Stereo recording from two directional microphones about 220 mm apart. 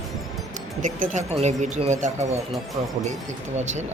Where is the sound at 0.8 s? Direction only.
35° right (ahead or behind).